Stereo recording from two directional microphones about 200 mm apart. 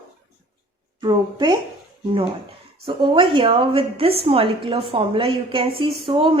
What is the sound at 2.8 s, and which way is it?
A woman's voice, 25° right (ahead or behind).